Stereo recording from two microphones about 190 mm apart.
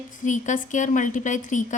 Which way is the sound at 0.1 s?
40° left (ahead or behind).